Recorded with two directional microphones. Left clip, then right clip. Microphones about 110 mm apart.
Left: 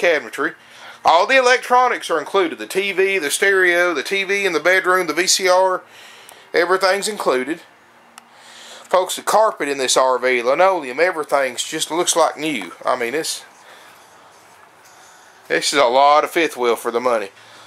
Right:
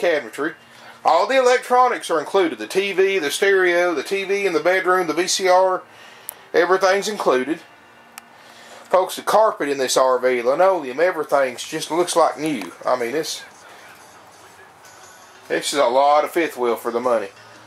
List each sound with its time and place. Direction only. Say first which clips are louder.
0.0 s speech: left 3 dB; 40° left (ahead or behind)
9.0 s speech: left 1 dB; 40° left (ahead or behind)
15.4 s speech: left 3 dB; 30° left (ahead or behind)